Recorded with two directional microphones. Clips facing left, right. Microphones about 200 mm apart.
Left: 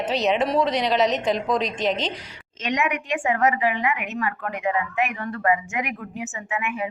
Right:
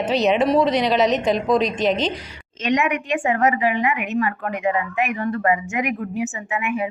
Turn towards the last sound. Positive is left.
turn(degrees=-15)  # may be behind; listen again after turning